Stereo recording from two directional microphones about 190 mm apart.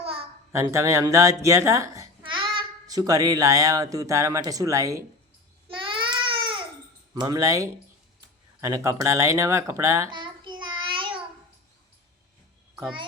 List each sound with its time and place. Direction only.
0.0 s babbling: 30° right (ahead or behind)
0.5 s speech: 15° right (ahead or behind)
5.6 s baby cry: 25° right (ahead or behind)
7.1 s a child's voice: 20° right (ahead or behind)